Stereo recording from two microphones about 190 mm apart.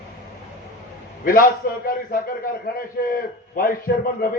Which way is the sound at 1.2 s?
45° left (ahead or behind).